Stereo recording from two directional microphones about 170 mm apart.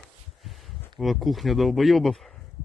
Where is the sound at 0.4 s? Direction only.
Centre (ahead or behind).